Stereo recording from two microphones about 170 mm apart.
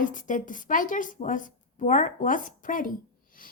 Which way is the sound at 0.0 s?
50° left (ahead or behind).